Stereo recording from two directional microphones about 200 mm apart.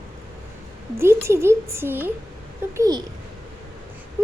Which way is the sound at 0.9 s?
15° right (ahead or behind).